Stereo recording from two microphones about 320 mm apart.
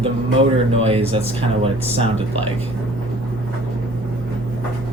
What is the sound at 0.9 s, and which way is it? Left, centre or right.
Speech, centre.